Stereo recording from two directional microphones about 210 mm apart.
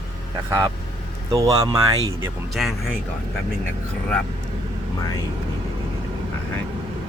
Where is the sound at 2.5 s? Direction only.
Centre (ahead or behind).